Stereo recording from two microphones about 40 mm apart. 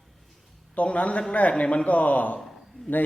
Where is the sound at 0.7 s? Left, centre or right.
Left.